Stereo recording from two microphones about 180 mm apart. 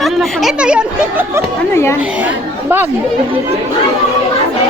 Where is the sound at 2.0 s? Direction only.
10° right (ahead or behind).